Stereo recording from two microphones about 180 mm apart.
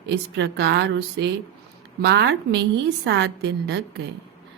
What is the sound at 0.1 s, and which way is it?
Speech, 70° right (ahead or behind).